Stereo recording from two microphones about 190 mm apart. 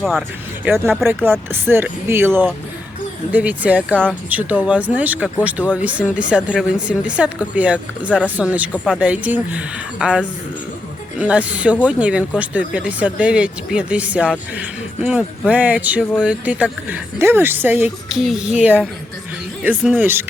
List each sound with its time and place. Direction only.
0.0 s a woman's voice: centre (ahead or behind)
0.7 s a woman's voice: 10° right (ahead or behind)